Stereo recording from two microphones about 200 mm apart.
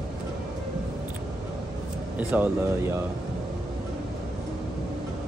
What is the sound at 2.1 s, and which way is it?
Speech, 10° right (ahead or behind).